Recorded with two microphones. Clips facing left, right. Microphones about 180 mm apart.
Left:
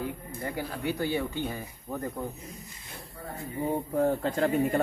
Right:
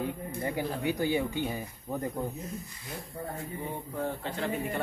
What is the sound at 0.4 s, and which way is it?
Speech, 20° right (ahead or behind).